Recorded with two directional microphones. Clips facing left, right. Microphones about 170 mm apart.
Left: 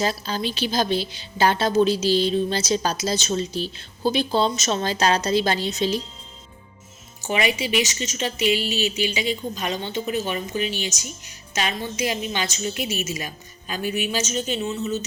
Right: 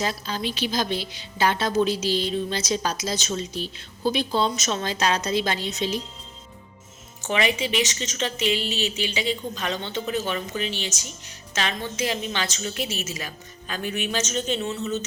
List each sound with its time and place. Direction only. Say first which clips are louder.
0.0 s a woman's voice: left 3 dB; 35° left (ahead or behind)
7.2 s a woman's voice: left 1 dB; 10° left (ahead or behind)